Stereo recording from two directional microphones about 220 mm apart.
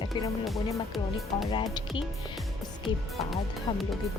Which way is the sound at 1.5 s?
20° left (ahead or behind).